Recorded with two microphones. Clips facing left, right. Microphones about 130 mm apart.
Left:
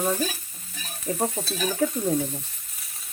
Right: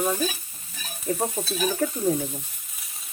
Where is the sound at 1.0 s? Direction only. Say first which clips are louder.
Even; 5° right (ahead or behind).